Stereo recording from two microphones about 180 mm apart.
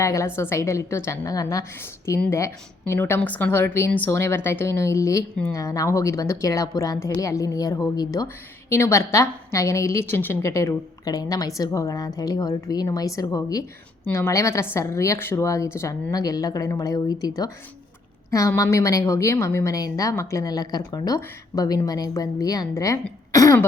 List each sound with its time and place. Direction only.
0.0 s a woman's voice: 15° left (ahead or behind)
23.3 s throat clearing: 15° left (ahead or behind)